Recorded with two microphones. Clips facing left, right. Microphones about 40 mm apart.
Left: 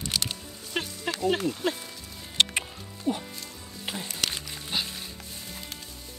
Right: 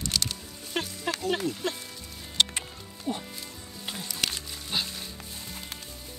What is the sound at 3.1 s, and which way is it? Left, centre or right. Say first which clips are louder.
Music: left 4 dB; centre.